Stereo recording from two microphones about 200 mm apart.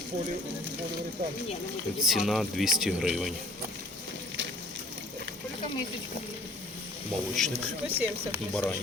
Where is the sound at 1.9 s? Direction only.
Centre (ahead or behind).